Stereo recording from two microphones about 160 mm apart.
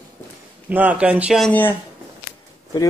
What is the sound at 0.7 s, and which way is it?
Speech, 10° right (ahead or behind).